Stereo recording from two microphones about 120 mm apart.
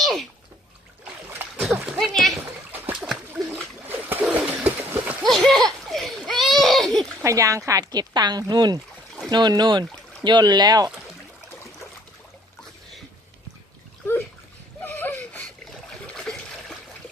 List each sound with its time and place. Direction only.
0.0 s bathtub: centre (ahead or behind)
1.4 s splash: 15° right (ahead or behind)
1.9 s a sound: centre (ahead or behind)
2.4 s splash: 15° right (ahead or behind)
4.8 s a sound: 15° right (ahead or behind)
5.2 s a sound: centre (ahead or behind)
7.3 s speech: 25° right (ahead or behind)
14.8 s whimper: 15° left (ahead or behind)
15.7 s water: 5° left (ahead or behind)